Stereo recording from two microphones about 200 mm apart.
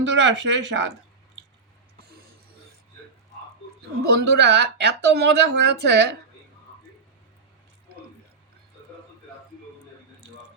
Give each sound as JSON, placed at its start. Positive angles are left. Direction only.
{"t": 0.0, "sound": "speech", "side_deg": -65}
{"t": 4.2, "sound": "speech", "side_deg": -55}